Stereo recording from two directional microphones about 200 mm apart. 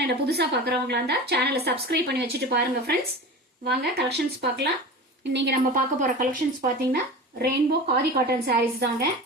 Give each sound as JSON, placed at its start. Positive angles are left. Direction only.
{"t": 0.0, "sound": "a woman's voice", "side_deg": -55}
{"t": 5.7, "sound": "speech", "side_deg": -40}